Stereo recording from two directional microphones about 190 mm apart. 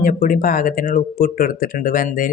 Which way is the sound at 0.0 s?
45° left (ahead or behind).